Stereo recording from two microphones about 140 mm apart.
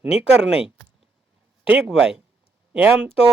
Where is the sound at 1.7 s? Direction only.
5° right (ahead or behind).